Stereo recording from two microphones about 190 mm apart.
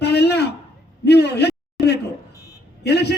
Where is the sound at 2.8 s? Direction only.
60° left (ahead or behind).